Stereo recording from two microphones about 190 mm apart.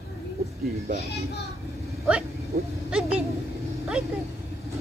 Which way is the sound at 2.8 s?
5° right (ahead or behind).